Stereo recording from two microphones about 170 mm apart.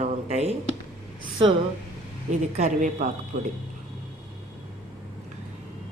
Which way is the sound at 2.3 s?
40° right (ahead or behind).